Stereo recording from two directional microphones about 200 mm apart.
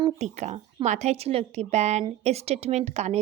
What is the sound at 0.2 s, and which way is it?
Speech, 35° right (ahead or behind).